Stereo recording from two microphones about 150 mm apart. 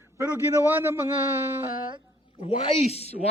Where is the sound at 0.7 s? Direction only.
15° right (ahead or behind).